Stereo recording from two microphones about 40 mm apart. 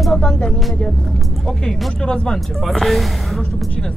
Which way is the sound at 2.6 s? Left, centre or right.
Centre.